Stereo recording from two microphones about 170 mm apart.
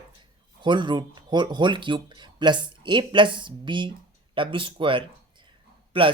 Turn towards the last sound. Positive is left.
turn(degrees=-30)  # may be behind; listen again after turning